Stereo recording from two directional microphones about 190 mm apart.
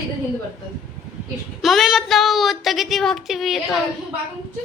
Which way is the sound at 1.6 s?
Centre (ahead or behind).